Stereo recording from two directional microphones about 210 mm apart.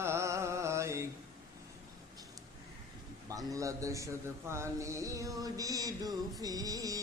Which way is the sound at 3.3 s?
15° right (ahead or behind).